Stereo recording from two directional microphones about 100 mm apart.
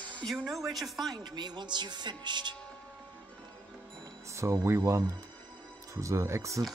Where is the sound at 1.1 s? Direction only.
45° right (ahead or behind).